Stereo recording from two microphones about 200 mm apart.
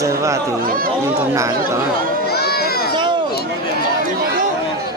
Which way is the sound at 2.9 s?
25° right (ahead or behind).